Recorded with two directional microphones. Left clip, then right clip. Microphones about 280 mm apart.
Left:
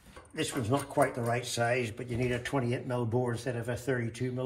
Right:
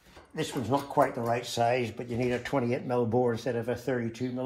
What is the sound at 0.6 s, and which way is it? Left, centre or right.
Speech, right.